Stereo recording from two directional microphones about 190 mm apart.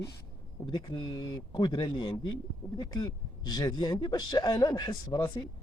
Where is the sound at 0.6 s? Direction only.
25° left (ahead or behind).